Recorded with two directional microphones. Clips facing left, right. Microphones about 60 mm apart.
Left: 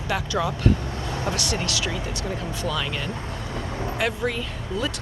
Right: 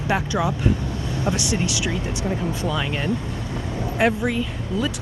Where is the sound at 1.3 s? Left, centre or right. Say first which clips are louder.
Right 4 dB; centre.